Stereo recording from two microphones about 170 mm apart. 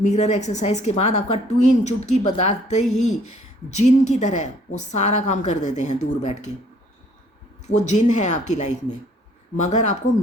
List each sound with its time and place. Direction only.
0.0 s a woman's voice: 40° left (ahead or behind)
7.7 s a woman's voice: 45° left (ahead or behind)